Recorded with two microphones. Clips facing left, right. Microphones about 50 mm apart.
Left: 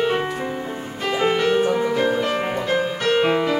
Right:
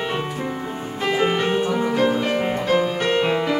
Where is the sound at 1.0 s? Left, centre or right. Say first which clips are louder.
Left 1 dB; centre.